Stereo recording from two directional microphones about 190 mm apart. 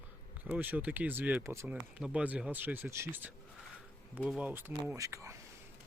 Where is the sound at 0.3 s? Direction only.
10° right (ahead or behind).